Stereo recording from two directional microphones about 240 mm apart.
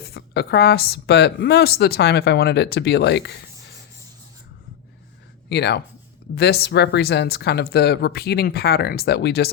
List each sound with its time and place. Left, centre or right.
0.0 s a woman's voice: left
5.5 s a woman's voice: left